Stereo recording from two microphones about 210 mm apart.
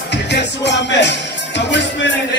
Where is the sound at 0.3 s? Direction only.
55° left (ahead or behind).